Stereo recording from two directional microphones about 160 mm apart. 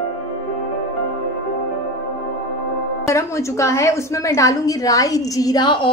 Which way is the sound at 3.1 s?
20° left (ahead or behind).